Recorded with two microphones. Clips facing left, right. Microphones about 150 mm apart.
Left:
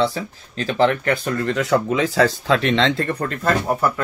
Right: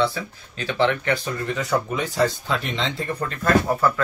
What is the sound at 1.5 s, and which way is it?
Speech, 85° left.